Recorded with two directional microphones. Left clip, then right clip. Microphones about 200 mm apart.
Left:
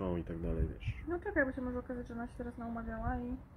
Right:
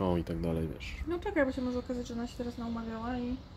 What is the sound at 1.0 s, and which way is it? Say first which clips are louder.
A woman's voice: right 3 dB; 25° right (ahead or behind).